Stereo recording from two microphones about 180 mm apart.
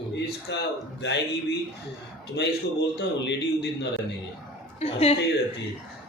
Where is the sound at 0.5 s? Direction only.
75° left (ahead or behind).